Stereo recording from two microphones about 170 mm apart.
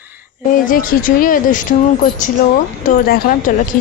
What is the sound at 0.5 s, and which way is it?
Speech, 55° left (ahead or behind).